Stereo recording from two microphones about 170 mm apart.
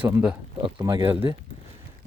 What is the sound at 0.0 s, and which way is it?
Speech, 10° right (ahead or behind).